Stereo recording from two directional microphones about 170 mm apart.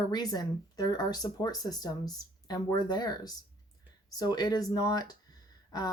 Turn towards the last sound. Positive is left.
turn(degrees=25)  # may be behind; listen again after turning